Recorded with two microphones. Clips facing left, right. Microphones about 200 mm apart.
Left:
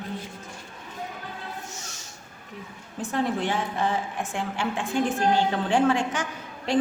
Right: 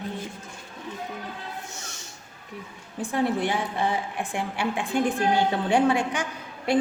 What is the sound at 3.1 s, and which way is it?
A woman's voice, 10° right (ahead or behind).